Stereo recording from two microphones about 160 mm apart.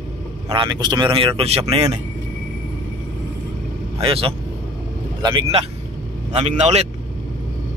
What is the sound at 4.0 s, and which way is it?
Speech, 35° right (ahead or behind).